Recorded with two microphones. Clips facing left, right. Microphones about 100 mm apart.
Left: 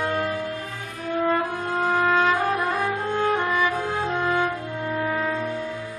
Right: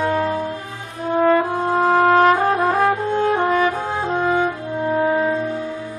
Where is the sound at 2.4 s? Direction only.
35° right (ahead or behind).